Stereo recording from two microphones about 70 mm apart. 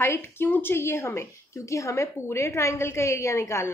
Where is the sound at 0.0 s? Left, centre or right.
Left.